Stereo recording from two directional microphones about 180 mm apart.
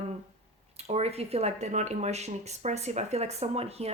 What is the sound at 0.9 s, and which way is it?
Speech, 35° right (ahead or behind).